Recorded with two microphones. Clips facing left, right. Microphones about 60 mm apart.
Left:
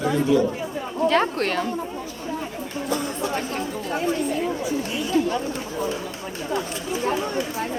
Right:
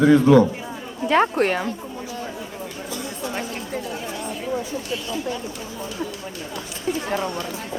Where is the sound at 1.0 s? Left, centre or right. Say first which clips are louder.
Right 3 dB; centre.